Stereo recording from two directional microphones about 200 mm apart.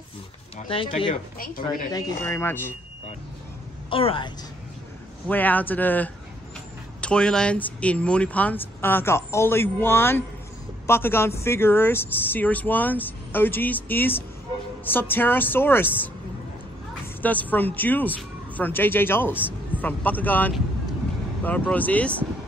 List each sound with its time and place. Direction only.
0.6 s speech: 25° left (ahead or behind)
3.9 s speech: 25° left (ahead or behind)
5.3 s speech: 10° left (ahead or behind)
17.2 s speech: 10° left (ahead or behind)